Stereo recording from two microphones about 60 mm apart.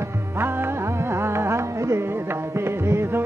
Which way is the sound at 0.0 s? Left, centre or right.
Right.